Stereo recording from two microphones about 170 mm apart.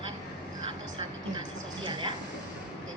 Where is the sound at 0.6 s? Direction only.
30° right (ahead or behind).